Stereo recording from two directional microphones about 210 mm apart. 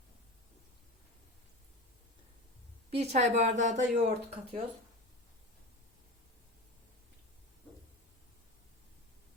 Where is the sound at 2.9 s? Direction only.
30° right (ahead or behind).